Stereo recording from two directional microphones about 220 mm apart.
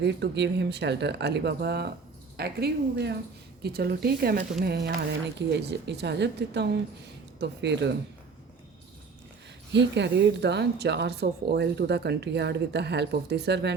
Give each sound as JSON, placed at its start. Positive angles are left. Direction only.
{"t": 0.0, "sound": "speech", "side_deg": -50}
{"t": 9.7, "sound": "speech", "side_deg": -50}